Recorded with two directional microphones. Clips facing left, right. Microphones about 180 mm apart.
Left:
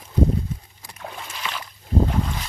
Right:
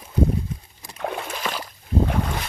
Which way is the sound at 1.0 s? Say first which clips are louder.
Right 8 dB; 65° right (ahead or behind).